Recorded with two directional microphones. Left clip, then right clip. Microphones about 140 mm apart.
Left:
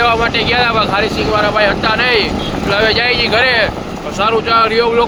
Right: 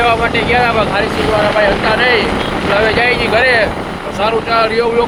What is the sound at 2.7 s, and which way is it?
Speech, 20° left (ahead or behind).